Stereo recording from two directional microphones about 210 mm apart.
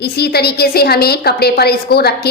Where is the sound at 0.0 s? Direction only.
50° left (ahead or behind).